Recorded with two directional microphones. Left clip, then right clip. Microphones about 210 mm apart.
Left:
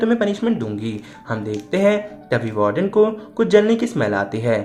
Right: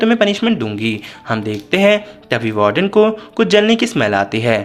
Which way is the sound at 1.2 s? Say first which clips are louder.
Right 5 dB; 45° right (ahead or behind).